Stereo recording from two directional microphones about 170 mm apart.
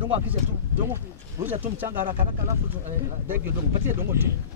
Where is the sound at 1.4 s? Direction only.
10° right (ahead or behind).